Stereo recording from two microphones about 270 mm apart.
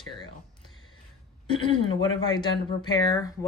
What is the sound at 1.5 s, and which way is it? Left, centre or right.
Speech, centre.